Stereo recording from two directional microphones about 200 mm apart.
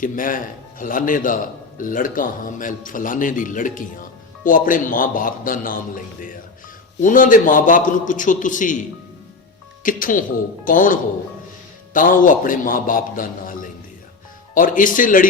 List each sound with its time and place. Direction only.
0.0 s a man's voice: 45° left (ahead or behind)